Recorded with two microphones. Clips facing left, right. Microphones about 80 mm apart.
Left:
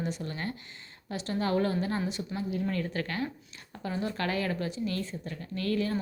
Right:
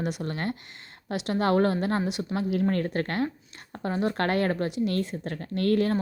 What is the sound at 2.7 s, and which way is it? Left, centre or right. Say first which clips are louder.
A woman's voice: right 5 dB; right.